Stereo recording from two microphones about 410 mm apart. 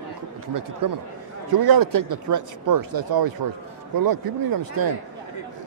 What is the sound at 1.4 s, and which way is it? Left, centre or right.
Speech, right.